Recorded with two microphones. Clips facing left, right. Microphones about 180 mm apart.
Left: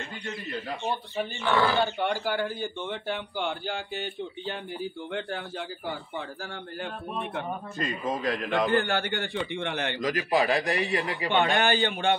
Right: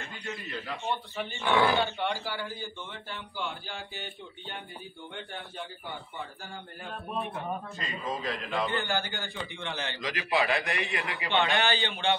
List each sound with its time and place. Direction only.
0.3 s a man's voice: 35° left (ahead or behind)
1.4 s speech: 15° right (ahead or behind)
1.8 s a man's voice: 45° left (ahead or behind); by 6.9 s 80° left
8.3 s a man's voice: 80° left; by 12.2 s 50° left (ahead or behind)